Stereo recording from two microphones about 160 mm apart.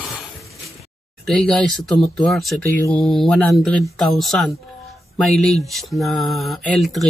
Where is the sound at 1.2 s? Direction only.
5° left (ahead or behind).